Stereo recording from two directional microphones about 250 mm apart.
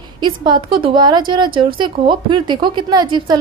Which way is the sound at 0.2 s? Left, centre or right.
Centre.